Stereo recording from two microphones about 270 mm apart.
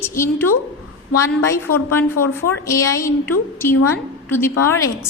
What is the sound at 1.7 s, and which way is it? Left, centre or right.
Speech, left.